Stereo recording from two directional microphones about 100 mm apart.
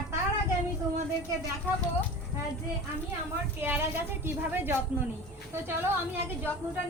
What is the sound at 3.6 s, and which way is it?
A woman's voice, 20° right (ahead or behind).